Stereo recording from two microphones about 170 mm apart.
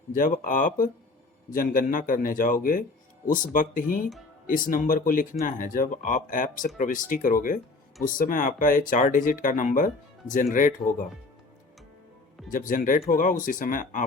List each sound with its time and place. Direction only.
0.1 s speech: 50° left (ahead or behind)
12.5 s speech: 50° left (ahead or behind)